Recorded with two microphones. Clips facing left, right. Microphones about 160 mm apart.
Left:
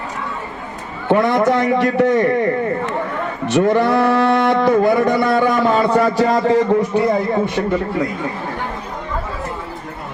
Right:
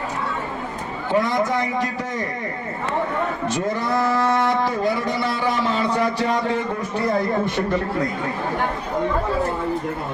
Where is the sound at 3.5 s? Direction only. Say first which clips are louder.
Left 13 dB; 65° left (ahead or behind); by 6.6 s 40° left (ahead or behind).